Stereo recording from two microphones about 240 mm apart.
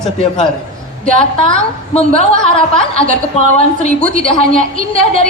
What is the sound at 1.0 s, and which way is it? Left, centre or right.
A woman's voice, left.